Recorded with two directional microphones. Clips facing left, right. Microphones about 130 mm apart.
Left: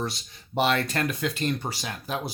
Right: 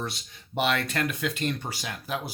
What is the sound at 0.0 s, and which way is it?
Speech, 35° left (ahead or behind).